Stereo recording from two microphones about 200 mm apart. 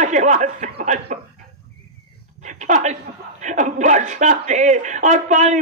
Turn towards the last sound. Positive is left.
turn(degrees=-35)  # may be behind; listen again after turning